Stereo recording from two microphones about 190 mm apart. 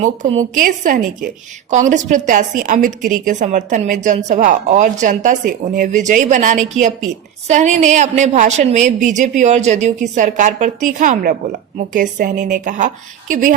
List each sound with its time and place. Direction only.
0.5 s a woman's voice: 45° right (ahead or behind)